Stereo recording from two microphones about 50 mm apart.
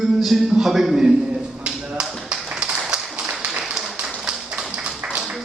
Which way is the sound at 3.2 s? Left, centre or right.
Right.